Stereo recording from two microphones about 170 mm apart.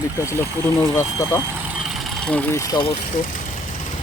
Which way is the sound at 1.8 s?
Centre (ahead or behind).